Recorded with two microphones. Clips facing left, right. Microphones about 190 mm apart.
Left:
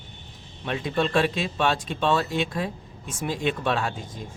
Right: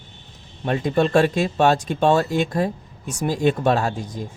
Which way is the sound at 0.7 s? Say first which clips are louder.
Right 6 dB; 45° right (ahead or behind).